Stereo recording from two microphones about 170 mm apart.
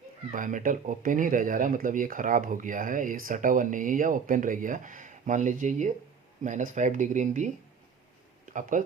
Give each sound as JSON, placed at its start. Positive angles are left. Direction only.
{"t": 0.3, "sound": "speech", "side_deg": -50}